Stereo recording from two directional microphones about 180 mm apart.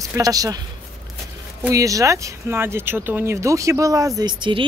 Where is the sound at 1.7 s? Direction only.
20° right (ahead or behind).